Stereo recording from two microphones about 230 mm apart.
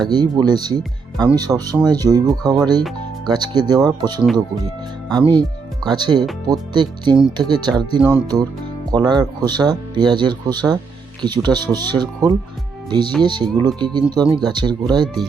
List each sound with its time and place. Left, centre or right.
0.0 s speech: centre